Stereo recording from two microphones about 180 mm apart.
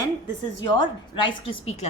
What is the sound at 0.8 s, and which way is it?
A woman's voice, 25° left (ahead or behind).